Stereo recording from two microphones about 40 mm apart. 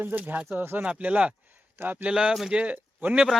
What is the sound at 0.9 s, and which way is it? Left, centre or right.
Speech, right.